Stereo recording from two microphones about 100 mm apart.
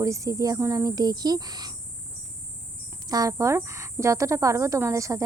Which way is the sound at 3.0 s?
35° right (ahead or behind).